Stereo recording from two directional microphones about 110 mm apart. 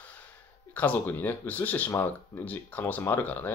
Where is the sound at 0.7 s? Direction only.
15° left (ahead or behind).